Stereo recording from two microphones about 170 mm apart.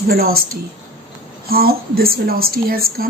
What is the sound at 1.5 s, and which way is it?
A woman's voice, 60° right (ahead or behind).